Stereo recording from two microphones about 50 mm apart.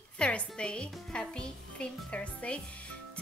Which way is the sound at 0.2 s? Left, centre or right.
Left.